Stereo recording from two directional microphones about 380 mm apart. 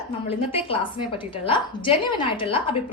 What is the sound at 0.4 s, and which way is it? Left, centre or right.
A woman's voice, centre.